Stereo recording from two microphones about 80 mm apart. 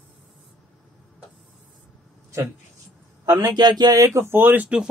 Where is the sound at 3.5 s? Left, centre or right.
Right.